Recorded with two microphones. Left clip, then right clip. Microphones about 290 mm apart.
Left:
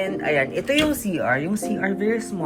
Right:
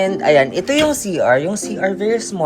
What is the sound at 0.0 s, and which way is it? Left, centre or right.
A woman's voice, centre.